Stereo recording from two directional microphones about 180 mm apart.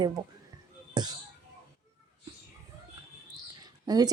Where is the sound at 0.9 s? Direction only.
25° right (ahead or behind).